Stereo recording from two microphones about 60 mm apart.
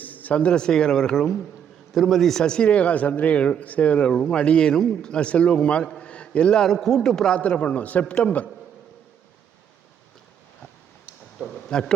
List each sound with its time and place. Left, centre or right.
0.0 s a man's voice: left; by 7.4 s centre
7.4 s a man's voice: left
11.7 s a man's voice: centre